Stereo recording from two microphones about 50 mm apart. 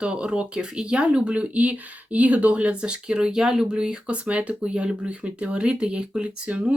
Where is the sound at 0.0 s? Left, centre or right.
Centre.